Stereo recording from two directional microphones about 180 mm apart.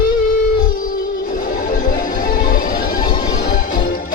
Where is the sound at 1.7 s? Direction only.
50° left (ahead or behind).